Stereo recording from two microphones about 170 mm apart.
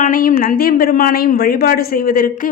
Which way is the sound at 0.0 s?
55° left (ahead or behind).